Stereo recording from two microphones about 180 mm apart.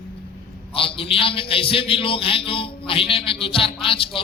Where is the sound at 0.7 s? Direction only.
30° left (ahead or behind).